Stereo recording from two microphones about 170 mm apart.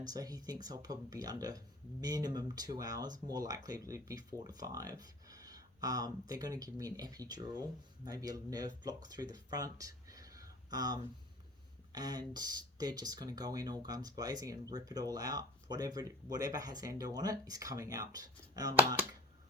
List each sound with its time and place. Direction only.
0.0 s speech: 20° right (ahead or behind)